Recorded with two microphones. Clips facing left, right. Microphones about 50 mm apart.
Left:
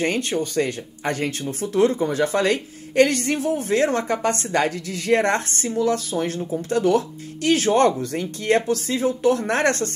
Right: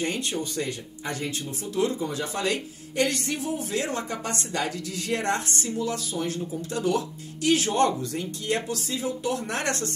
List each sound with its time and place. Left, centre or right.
0.0 s speech: left